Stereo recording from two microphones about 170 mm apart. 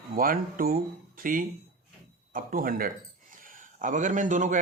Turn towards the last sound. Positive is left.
turn(degrees=-45)  # may be behind; listen again after turning